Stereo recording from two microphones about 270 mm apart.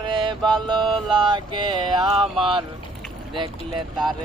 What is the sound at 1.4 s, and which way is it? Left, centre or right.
Mantra, centre.